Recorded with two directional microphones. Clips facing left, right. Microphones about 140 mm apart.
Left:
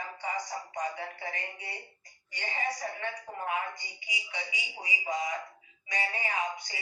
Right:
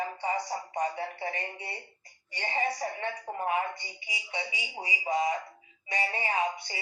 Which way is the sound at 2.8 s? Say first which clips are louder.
Right 3 dB; 25° right (ahead or behind).